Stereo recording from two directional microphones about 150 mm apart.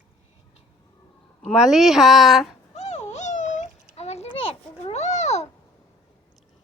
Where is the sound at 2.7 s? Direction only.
50° left (ahead or behind).